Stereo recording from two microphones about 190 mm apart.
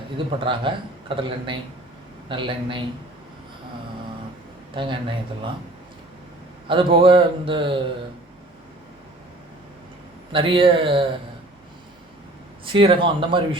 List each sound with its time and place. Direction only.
0.3 s a man's voice: 25° right (ahead or behind)
4.7 s a man's voice: 25° right (ahead or behind)
6.7 s a man's voice: 25° right (ahead or behind)
10.3 s a man's voice: 25° right (ahead or behind)
12.6 s a man's voice: 25° right (ahead or behind)